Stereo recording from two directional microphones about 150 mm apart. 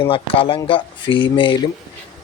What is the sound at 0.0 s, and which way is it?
Speech, 35° left (ahead or behind).